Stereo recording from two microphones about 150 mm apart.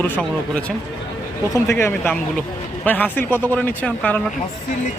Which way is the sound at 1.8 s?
15° left (ahead or behind).